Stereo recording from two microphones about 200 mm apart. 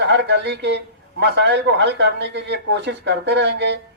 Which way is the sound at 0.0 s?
60° right (ahead or behind).